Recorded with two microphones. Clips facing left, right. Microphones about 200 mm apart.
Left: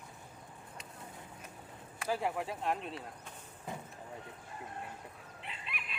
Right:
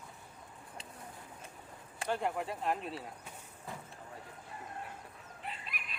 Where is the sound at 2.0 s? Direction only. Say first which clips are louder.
Even; centre (ahead or behind).